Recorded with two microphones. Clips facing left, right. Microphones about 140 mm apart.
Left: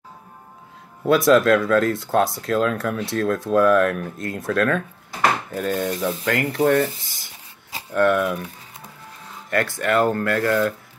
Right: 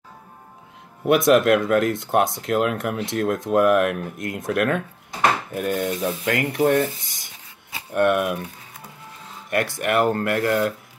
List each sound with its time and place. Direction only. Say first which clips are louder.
1.0 s speech: left 1 dB; 20° right (ahead or behind)
9.5 s speech: left 1 dB; 20° right (ahead or behind)